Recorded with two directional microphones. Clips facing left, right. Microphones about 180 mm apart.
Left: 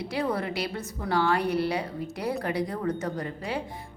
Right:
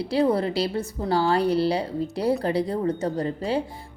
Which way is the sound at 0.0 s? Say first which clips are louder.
Right 7 dB; 30° right (ahead or behind).